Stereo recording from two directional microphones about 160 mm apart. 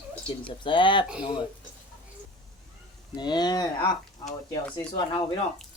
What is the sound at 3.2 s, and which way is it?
Speech, 25° left (ahead or behind).